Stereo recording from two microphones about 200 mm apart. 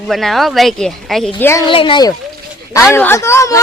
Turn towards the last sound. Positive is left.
turn(degrees=15)  # may be behind; listen again after turning